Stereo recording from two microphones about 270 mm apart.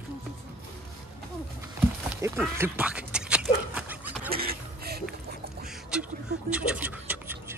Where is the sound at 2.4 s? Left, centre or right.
Centre.